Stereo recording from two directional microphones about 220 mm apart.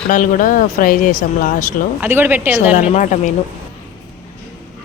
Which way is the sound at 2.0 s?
10° right (ahead or behind).